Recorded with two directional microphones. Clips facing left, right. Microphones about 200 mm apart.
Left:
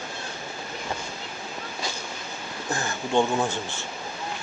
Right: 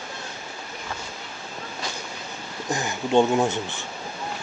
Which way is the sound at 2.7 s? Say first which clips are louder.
Right 4 dB; 20° right (ahead or behind).